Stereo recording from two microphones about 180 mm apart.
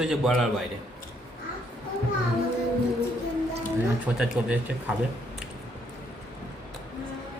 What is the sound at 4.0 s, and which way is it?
Speech, 5° right (ahead or behind).